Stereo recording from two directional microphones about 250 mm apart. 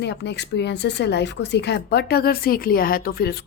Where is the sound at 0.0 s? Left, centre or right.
Left.